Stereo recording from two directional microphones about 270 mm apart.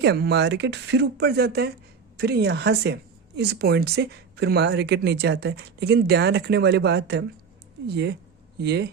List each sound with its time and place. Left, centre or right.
0.0 s a woman's voice: right